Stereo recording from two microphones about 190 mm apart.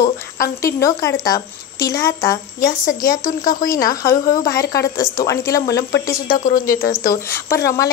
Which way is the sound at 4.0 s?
15° left (ahead or behind).